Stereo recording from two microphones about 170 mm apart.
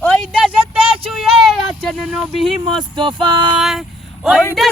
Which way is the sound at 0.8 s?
35° right (ahead or behind).